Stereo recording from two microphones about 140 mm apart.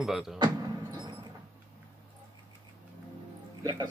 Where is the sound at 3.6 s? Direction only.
30° right (ahead or behind).